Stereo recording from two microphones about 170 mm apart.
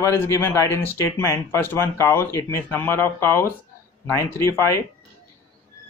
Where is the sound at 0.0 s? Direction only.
15° left (ahead or behind).